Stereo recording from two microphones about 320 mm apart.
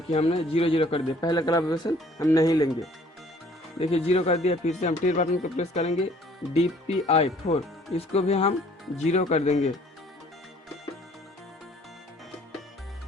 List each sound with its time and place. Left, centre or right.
0.1 s a man's voice: centre
3.8 s speech: centre